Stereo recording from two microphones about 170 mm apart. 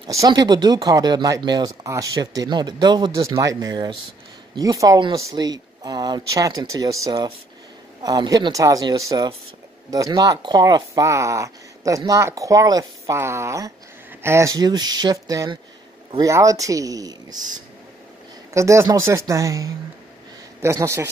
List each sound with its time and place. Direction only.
0.0 s a woman's voice: 25° right (ahead or behind)